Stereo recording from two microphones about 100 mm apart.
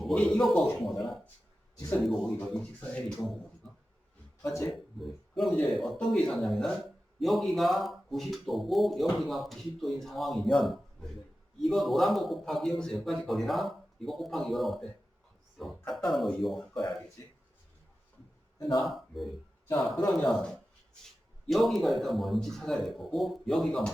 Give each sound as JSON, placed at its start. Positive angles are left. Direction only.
{"t": 0.0, "sound": "speech", "side_deg": 5}
{"t": 4.7, "sound": "speech", "side_deg": 0}
{"t": 15.9, "sound": "speech", "side_deg": 0}
{"t": 18.8, "sound": "speech", "side_deg": 0}